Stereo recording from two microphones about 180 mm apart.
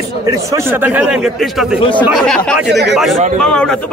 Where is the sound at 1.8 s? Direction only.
25° left (ahead or behind).